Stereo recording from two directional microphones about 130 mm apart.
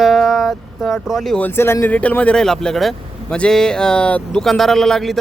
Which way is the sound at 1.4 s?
15° left (ahead or behind).